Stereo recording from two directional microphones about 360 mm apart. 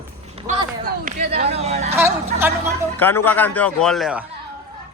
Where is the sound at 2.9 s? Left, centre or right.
Centre.